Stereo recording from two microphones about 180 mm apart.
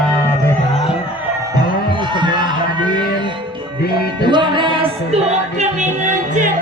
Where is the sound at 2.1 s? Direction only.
25° right (ahead or behind).